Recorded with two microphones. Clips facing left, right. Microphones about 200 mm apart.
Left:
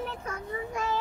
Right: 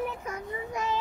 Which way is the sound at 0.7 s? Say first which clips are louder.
Right 1 dB; 20° right (ahead or behind).